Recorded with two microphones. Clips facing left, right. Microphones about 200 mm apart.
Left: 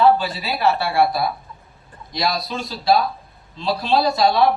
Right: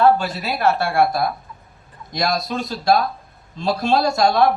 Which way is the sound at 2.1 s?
50° right (ahead or behind).